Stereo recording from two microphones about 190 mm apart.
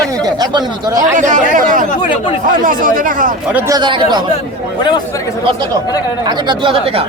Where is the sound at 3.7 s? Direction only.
25° right (ahead or behind).